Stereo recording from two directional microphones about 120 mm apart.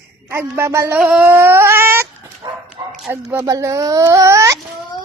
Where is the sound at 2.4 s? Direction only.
35° right (ahead or behind).